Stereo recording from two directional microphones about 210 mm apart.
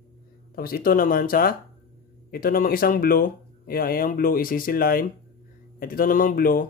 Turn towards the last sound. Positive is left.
turn(degrees=40)  # may be behind; listen again after turning